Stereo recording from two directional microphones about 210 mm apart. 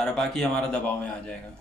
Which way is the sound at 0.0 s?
Centre (ahead or behind).